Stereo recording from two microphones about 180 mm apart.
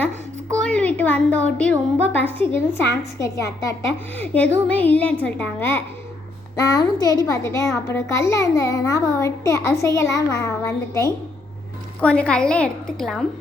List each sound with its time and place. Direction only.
0.6 s a sound: 5° left (ahead or behind)
2.1 s a child's voice: 10° left (ahead or behind)
11.9 s a woman's voice: 5° left (ahead or behind)